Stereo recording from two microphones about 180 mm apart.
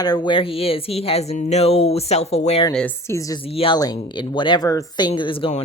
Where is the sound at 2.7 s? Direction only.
10° left (ahead or behind).